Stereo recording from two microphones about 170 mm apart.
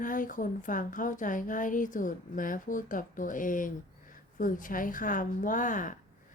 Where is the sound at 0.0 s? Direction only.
50° left (ahead or behind).